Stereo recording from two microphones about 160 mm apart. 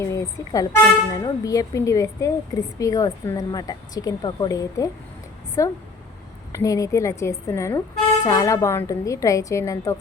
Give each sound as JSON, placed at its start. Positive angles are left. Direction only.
{"t": 0.0, "sound": "a woman's voice", "side_deg": 20}